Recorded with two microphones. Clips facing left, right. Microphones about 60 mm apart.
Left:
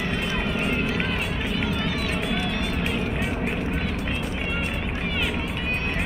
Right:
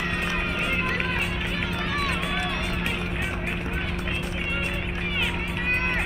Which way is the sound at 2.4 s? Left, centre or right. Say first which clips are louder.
Left 2 dB; right.